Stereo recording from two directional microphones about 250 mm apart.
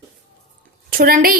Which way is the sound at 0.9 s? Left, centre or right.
Right.